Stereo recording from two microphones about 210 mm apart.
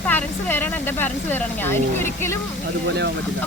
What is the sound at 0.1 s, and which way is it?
Speech, 10° left (ahead or behind).